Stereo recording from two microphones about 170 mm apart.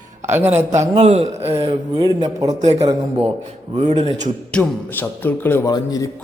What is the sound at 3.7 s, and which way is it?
Speech, 40° right (ahead or behind).